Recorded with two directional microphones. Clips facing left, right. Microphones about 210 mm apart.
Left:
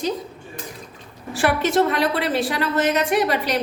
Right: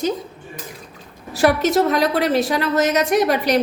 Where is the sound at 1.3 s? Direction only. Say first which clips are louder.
Right 3 dB; 40° right (ahead or behind).